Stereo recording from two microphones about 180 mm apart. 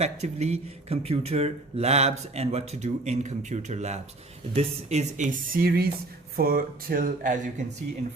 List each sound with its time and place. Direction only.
0.0 s speech: 35° right (ahead or behind)